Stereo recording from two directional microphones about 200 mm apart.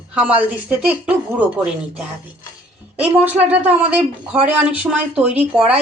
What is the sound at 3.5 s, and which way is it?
Speech, 10° right (ahead or behind).